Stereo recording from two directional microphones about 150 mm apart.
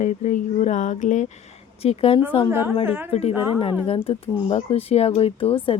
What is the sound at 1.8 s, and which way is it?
Speech, 40° left (ahead or behind).